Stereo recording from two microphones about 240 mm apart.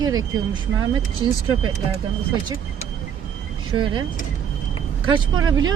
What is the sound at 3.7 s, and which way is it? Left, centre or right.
Speech, centre.